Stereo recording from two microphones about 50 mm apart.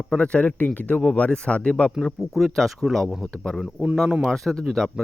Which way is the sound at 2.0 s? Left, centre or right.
Centre.